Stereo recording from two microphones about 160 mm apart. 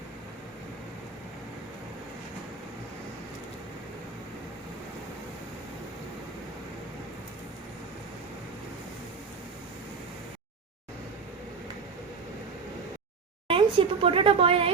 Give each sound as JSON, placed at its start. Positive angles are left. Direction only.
{"t": 13.5, "sound": "a woman's voice", "side_deg": -35}